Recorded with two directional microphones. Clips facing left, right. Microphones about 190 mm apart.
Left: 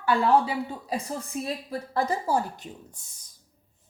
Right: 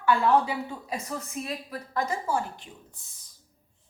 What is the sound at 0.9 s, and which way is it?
A woman's voice, 30° left (ahead or behind).